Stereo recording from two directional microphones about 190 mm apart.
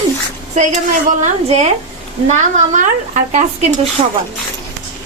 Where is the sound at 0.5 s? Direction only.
40° right (ahead or behind).